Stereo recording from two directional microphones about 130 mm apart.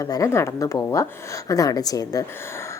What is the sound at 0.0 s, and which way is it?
A woman's voice, 25° left (ahead or behind).